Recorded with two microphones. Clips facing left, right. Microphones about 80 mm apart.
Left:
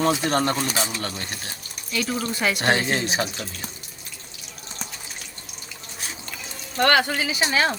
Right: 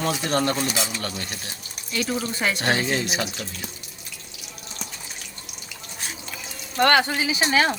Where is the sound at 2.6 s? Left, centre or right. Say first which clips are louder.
Left 2 dB; left.